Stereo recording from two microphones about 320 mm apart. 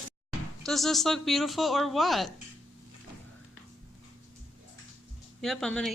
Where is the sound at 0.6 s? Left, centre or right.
Centre.